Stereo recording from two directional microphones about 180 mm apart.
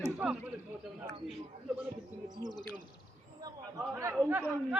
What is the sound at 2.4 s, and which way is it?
Bird, 25° left (ahead or behind).